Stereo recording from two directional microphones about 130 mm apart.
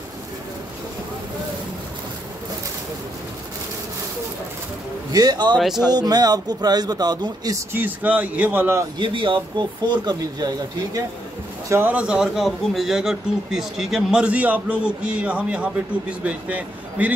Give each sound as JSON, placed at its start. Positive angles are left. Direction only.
{"t": 5.1, "sound": "speech", "side_deg": -30}
{"t": 5.6, "sound": "speech", "side_deg": 0}
{"t": 5.9, "sound": "speech", "side_deg": -30}
{"t": 7.7, "sound": "a man's voice", "side_deg": -15}
{"t": 8.9, "sound": "speech", "side_deg": -40}
{"t": 11.7, "sound": "a man's voice", "side_deg": -15}